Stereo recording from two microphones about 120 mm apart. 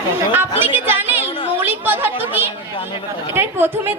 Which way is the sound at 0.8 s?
15° right (ahead or behind).